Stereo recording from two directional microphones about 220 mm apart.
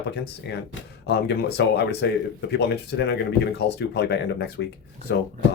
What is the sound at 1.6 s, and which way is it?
Speech, 50° left (ahead or behind).